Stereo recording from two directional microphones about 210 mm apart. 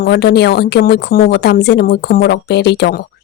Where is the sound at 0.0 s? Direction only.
50° left (ahead or behind).